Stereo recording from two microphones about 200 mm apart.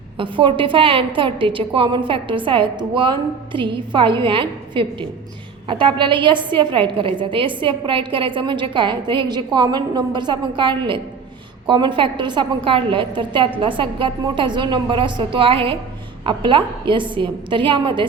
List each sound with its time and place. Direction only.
0.2 s a woman's voice: 25° right (ahead or behind)